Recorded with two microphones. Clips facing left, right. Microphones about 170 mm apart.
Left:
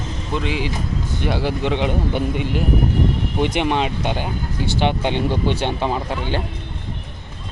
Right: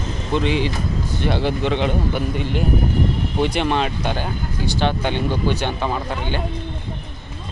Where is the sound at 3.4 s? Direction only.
15° left (ahead or behind).